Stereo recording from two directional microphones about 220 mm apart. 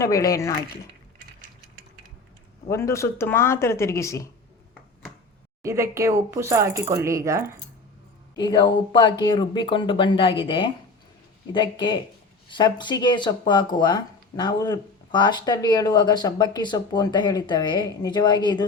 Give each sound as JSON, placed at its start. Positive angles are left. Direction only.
{"t": 0.0, "sound": "speech", "side_deg": 15}
{"t": 2.6, "sound": "speech", "side_deg": 15}
{"t": 5.6, "sound": "speech", "side_deg": -15}
{"t": 8.4, "sound": "speech", "side_deg": 20}